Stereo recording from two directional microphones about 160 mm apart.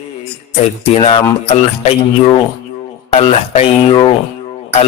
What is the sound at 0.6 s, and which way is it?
Speech, 40° left (ahead or behind).